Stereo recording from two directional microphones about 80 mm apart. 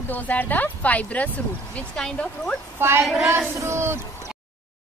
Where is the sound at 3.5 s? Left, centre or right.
Right.